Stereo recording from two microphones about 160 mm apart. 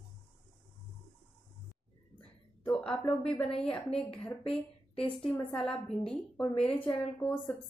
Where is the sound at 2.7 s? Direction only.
5° left (ahead or behind).